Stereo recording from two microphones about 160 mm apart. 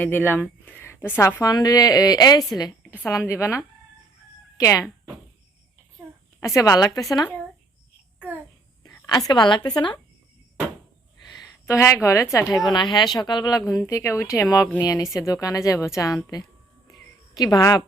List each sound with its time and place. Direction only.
0.0 s a woman's voice: 10° left (ahead or behind)
6.4 s a woman's voice: 20° left (ahead or behind)
9.0 s a woman's voice: 25° left (ahead or behind)
11.2 s a sound: 25° left (ahead or behind)
12.0 s a woman's voice: 20° left (ahead or behind)
16.9 s a sound: 25° left (ahead or behind)